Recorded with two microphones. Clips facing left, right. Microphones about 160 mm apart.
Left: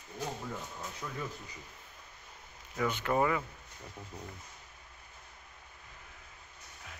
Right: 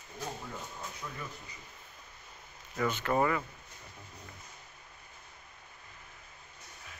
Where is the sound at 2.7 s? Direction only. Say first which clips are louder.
Right 1 dB; 10° left (ahead or behind).